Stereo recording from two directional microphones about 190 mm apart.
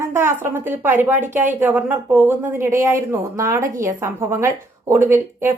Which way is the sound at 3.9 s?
15° right (ahead or behind).